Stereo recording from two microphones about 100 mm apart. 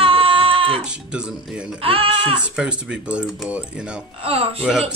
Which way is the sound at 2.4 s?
10° right (ahead or behind).